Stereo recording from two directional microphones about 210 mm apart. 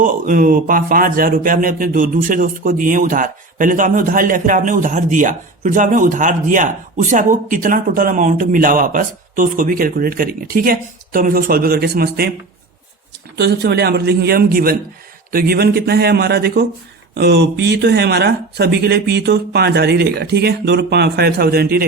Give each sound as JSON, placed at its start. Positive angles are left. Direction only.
{"t": 0.0, "sound": "speech", "side_deg": -40}
{"t": 13.3, "sound": "speech", "side_deg": -50}